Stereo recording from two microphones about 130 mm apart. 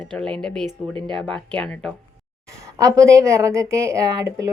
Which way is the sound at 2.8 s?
25° right (ahead or behind).